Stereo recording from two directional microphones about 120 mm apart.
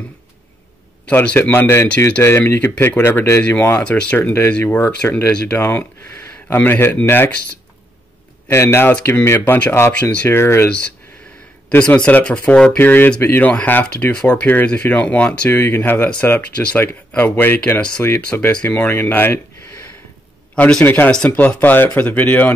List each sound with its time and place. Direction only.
1.1 s speech: 15° left (ahead or behind)
4.2 s speech: 20° left (ahead or behind)
8.5 s speech: 20° left (ahead or behind)
11.7 s speech: 10° left (ahead or behind)